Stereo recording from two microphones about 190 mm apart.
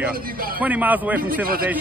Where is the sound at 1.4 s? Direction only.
50° right (ahead or behind).